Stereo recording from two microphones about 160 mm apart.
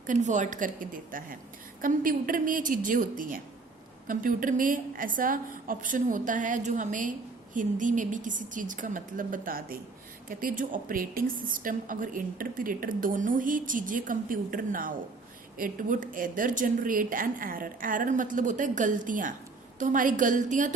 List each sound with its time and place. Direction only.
0.1 s a woman's voice: 50° right (ahead or behind)